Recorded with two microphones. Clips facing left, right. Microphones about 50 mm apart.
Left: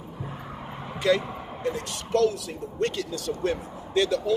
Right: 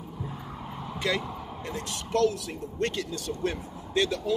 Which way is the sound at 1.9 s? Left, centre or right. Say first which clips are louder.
Left 1 dB; centre.